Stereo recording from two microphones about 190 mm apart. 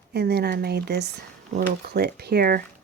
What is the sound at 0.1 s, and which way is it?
Speech, 60° right (ahead or behind).